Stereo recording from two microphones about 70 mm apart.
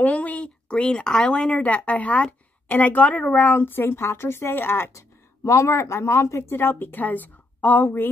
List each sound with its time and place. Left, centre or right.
0.0 s a woman's voice: left
4.9 s speech: left